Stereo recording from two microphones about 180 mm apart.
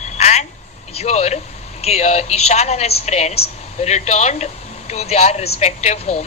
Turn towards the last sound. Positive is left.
turn(degrees=40)  # may be behind; listen again after turning